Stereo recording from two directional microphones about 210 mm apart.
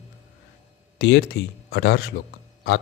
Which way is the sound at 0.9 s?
55° left (ahead or behind).